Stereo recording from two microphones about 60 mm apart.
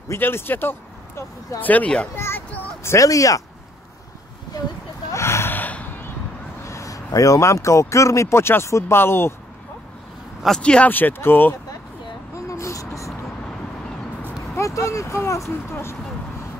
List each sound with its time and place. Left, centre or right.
0.2 s speech: left
2.1 s a child's voice: left
3.0 s speech: left
5.1 s gasp: left
5.5 s gasp: left
6.6 s speech: left
10.6 s speech: centre
10.9 s speech: left
12.4 s vehicle: left
14.6 s speech: left